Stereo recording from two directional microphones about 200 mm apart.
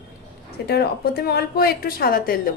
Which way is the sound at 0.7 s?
55° left (ahead or behind).